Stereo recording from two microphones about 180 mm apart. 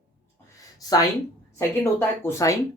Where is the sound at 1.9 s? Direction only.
15° left (ahead or behind).